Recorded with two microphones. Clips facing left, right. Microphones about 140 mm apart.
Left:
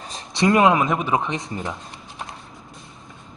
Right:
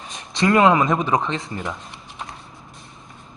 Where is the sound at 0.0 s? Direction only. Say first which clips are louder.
Left 1 dB; 35° left (ahead or behind).